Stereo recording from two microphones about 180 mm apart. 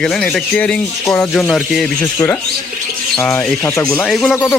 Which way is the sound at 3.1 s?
10° left (ahead or behind).